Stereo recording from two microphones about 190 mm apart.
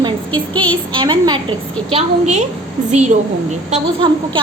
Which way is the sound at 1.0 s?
25° right (ahead or behind).